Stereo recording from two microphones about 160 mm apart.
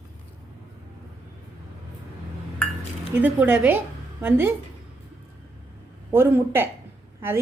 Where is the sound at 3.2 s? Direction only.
10° right (ahead or behind).